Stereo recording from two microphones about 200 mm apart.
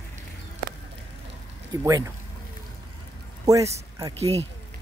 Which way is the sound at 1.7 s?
15° right (ahead or behind).